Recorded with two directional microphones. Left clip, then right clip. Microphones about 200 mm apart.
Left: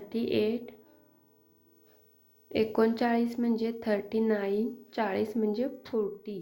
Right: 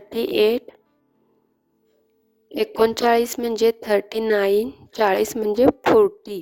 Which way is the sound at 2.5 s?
60° right (ahead or behind).